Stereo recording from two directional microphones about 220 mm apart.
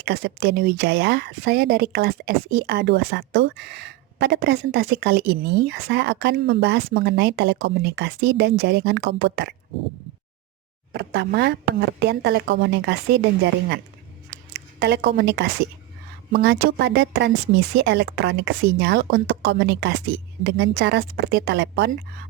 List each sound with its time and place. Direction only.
0.0 s speech: 45° right (ahead or behind)
10.9 s a woman's voice: 45° right (ahead or behind)